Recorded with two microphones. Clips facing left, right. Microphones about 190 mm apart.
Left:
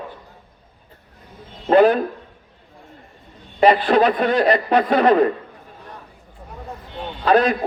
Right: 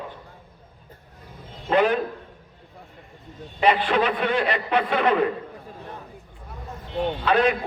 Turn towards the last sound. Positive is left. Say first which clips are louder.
# left 4 dB
turn(degrees=40)  # may be behind; listen again after turning